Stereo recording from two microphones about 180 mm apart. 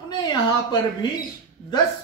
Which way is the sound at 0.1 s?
25° left (ahead or behind).